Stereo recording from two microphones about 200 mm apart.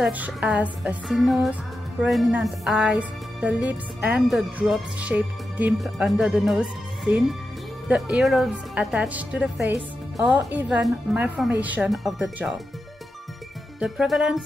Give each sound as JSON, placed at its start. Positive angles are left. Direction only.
{"t": 0.0, "sound": "music", "side_deg": -5}
{"t": 10.1, "sound": "speech", "side_deg": -5}
{"t": 11.6, "sound": "music", "side_deg": -5}
{"t": 13.7, "sound": "music", "side_deg": 0}